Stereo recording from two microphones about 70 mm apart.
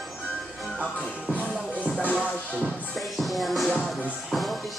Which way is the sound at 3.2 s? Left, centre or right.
Centre.